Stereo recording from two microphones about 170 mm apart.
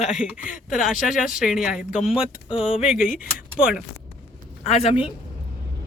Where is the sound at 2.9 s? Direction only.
50° left (ahead or behind).